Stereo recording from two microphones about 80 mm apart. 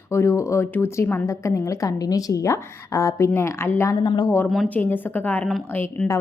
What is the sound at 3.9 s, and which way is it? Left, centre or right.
Speech, left.